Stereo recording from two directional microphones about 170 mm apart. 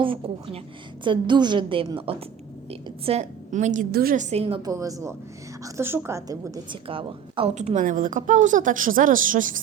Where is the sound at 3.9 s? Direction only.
55° right (ahead or behind); by 4.7 s 30° right (ahead or behind).